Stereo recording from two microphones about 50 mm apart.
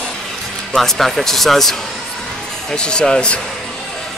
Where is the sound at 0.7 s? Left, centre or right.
Centre.